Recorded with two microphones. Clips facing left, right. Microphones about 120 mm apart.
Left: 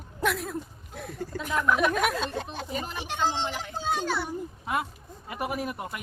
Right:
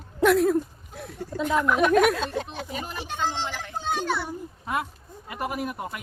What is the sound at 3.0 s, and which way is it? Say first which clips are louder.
Speech: left 1 dB; 25° left (ahead or behind).